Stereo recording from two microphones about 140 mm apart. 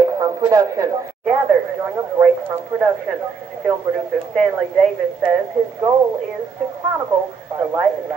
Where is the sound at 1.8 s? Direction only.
10° right (ahead or behind).